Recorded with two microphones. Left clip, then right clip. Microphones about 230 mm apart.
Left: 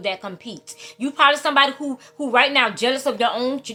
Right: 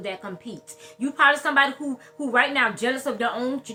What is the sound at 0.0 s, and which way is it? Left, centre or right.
Speech, centre.